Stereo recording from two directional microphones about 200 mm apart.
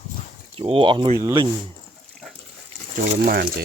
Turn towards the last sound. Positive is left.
turn(degrees=-50)  # may be behind; listen again after turning